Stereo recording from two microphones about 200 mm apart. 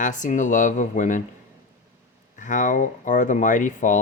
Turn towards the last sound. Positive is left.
turn(degrees=40)  # may be behind; listen again after turning